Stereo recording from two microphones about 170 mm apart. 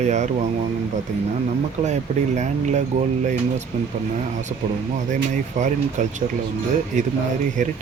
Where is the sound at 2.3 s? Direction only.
45° right (ahead or behind).